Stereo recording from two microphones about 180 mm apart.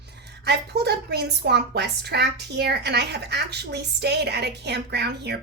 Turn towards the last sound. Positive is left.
turn(degrees=-65)  # may be behind; listen again after turning